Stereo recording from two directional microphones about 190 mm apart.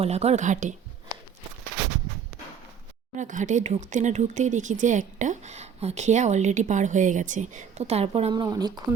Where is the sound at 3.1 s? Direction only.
40° right (ahead or behind).